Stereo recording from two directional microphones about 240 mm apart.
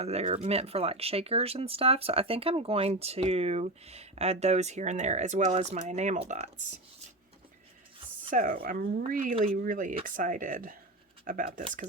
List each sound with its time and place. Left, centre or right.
0.0 s speech: right
8.3 s speech: right